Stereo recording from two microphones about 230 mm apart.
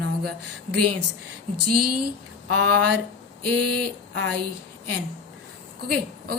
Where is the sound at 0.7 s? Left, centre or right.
Right.